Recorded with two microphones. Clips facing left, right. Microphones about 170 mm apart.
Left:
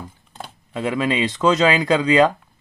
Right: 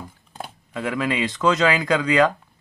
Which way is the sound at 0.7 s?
20° left (ahead or behind).